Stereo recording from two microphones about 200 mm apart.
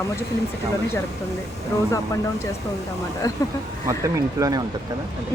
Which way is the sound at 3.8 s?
15° right (ahead or behind).